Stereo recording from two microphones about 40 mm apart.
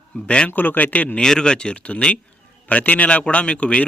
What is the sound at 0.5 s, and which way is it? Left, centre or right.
Speech, left.